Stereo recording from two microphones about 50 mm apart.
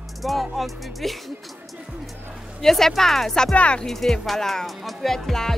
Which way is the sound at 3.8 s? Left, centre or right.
Centre.